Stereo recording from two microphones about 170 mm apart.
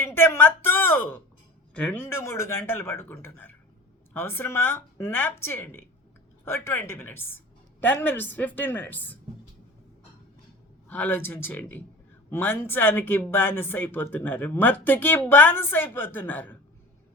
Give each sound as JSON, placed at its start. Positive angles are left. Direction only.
{"t": 0.1, "sound": "a sound", "side_deg": 15}
{"t": 1.7, "sound": "speech", "side_deg": 10}
{"t": 10.8, "sound": "speech", "side_deg": 10}